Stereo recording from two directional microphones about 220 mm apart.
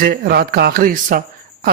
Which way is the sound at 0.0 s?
45° right (ahead or behind).